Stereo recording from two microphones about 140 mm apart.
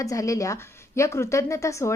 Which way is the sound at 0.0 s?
25° left (ahead or behind).